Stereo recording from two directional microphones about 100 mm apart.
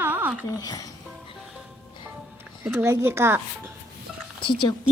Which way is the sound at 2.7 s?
20° right (ahead or behind).